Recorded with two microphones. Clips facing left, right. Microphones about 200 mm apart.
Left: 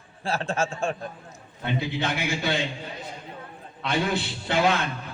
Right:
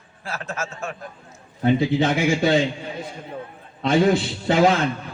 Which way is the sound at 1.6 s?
45° right (ahead or behind).